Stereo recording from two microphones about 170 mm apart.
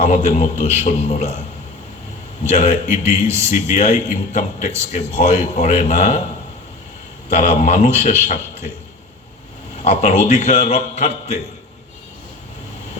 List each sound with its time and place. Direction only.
0.0 s a man's voice: 45° left (ahead or behind)
2.6 s a man's voice: 45° left (ahead or behind)
7.3 s a man's voice: 45° left (ahead or behind)
9.8 s a man's voice: 40° left (ahead or behind)